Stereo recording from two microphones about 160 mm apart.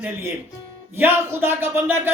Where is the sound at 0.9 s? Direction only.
15° right (ahead or behind).